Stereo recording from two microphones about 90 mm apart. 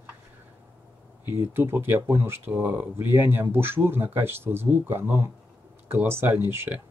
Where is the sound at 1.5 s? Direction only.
25° right (ahead or behind).